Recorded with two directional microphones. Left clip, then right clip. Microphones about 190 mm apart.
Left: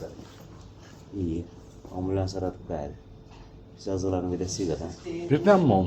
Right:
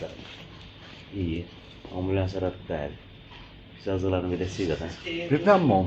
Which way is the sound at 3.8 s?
20° right (ahead or behind).